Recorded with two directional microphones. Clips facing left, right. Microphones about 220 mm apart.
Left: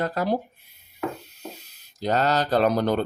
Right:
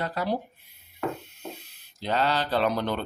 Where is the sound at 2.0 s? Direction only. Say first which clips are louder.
Left 4 dB; 45° left (ahead or behind).